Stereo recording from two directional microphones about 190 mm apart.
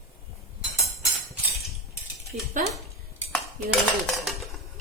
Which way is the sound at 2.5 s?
35° right (ahead or behind).